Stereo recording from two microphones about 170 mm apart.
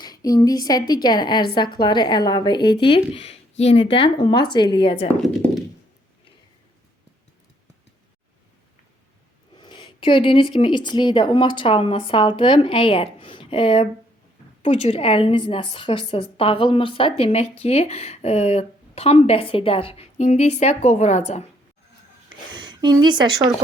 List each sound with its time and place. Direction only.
0.0 s a woman's voice: 25° left (ahead or behind)
9.6 s a woman's voice: 25° left (ahead or behind)
22.5 s a woman's voice: 25° right (ahead or behind)